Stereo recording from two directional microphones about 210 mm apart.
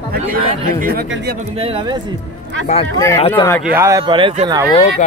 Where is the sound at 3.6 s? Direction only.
10° right (ahead or behind).